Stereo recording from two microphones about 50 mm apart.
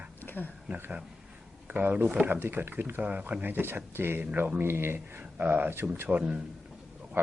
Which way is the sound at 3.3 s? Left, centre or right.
Right.